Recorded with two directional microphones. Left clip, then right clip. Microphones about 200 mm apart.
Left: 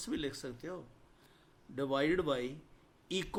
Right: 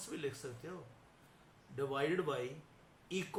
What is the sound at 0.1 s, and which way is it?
Speech, 45° left (ahead or behind).